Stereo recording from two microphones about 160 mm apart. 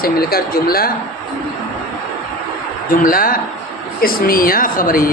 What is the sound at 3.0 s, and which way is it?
A man's voice, 60° left (ahead or behind).